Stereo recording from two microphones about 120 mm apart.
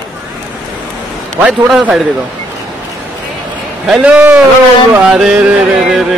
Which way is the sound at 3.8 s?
10° right (ahead or behind).